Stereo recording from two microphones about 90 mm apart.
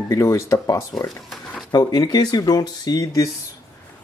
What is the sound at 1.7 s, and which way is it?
Speech, 50° left (ahead or behind).